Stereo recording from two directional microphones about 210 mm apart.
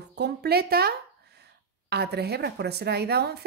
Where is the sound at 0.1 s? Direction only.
50° right (ahead or behind).